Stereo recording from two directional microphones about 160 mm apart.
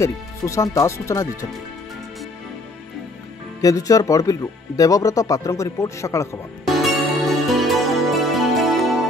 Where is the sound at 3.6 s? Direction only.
20° left (ahead or behind).